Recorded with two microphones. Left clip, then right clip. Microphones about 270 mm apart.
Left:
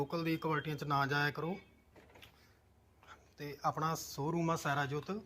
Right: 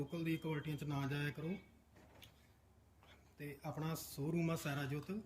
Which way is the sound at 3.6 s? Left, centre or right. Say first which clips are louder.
Left 12 dB; centre.